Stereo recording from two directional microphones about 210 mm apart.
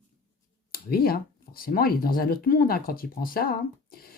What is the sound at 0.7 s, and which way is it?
Speech, 45° left (ahead or behind).